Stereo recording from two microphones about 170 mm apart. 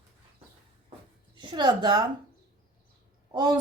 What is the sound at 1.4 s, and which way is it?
Speech, 25° right (ahead or behind).